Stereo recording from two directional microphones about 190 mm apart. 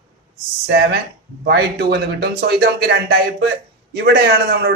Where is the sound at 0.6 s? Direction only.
60° right (ahead or behind).